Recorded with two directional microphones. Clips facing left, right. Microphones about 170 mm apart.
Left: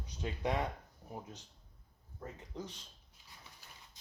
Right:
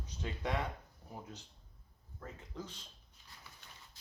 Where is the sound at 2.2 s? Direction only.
15° left (ahead or behind).